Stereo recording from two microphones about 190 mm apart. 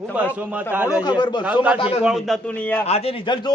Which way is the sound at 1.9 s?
Centre (ahead or behind).